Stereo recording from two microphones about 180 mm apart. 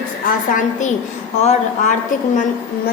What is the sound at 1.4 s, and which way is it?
Speech, 40° left (ahead or behind).